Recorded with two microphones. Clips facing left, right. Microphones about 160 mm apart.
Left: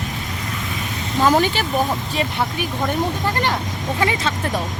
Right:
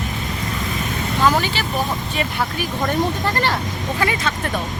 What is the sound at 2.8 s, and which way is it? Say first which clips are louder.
Speech: right 1 dB; 15° left (ahead or behind).